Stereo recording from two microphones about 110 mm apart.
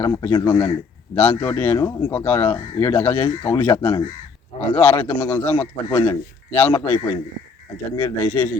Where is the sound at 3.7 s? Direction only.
55° left (ahead or behind).